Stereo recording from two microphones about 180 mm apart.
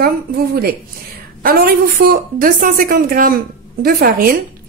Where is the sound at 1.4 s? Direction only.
55° right (ahead or behind).